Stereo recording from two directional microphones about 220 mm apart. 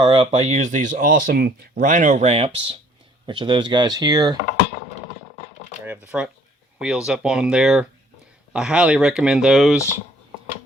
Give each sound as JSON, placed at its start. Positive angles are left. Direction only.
{"t": 0.0, "sound": "speech", "side_deg": -25}
{"t": 5.8, "sound": "speech", "side_deg": -5}